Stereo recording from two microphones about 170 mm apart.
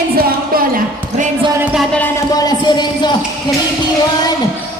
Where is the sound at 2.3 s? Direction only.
25° left (ahead or behind).